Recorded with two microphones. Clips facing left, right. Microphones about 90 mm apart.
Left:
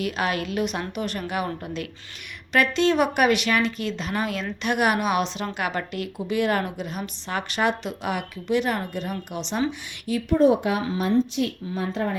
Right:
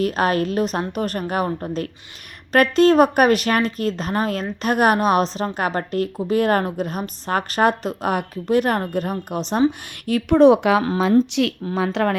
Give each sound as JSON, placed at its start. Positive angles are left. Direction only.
{"t": 0.0, "sound": "a woman's voice", "side_deg": -40}
{"t": 10.1, "sound": "speech", "side_deg": -65}